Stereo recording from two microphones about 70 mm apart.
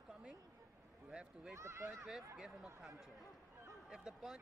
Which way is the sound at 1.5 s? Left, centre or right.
Right.